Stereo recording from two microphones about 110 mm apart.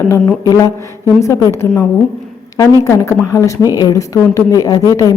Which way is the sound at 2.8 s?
25° left (ahead or behind).